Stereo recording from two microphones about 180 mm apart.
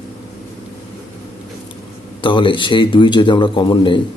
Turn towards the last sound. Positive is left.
turn(degrees=25)  # may be behind; listen again after turning